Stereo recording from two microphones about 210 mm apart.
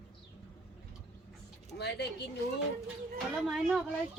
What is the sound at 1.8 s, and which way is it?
Speech, 50° left (ahead or behind).